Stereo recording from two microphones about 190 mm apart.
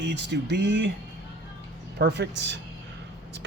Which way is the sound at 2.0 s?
65° right (ahead or behind).